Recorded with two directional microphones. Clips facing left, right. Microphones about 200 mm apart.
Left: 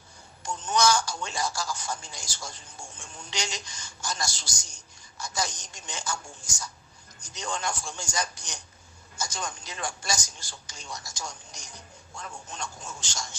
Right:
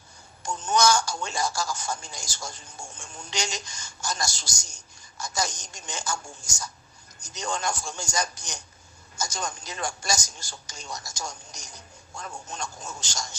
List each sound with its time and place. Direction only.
0.4 s telephone: 45° right (ahead or behind)
3.0 s a man's voice: 45° right (ahead or behind)